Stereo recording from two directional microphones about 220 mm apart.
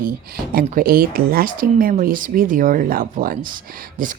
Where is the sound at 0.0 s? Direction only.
40° right (ahead or behind).